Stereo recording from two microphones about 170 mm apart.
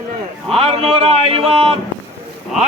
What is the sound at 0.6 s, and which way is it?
A man's voice, 35° right (ahead or behind).